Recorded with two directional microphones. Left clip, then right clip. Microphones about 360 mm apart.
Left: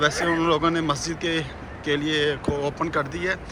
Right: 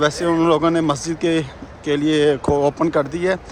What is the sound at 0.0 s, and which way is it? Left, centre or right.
Speech, centre.